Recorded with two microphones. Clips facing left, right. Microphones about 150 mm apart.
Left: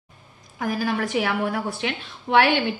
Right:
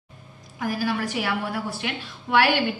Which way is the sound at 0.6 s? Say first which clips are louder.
Left 1 dB; 50° left (ahead or behind).